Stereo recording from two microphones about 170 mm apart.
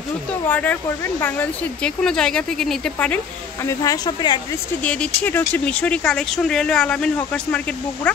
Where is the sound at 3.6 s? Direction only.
20° left (ahead or behind).